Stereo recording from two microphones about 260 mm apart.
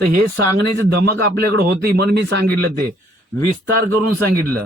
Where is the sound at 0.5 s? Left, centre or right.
Right.